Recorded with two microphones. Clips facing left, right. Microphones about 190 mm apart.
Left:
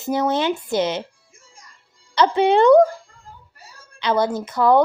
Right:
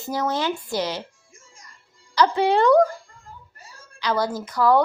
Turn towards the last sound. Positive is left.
turn(degrees=20)  # may be behind; listen again after turning